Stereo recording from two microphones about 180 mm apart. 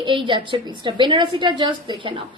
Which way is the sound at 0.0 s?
25° right (ahead or behind).